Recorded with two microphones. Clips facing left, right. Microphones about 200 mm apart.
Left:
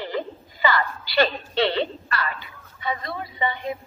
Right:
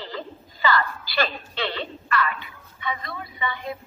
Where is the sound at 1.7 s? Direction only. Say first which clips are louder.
Left 2 dB; 35° left (ahead or behind).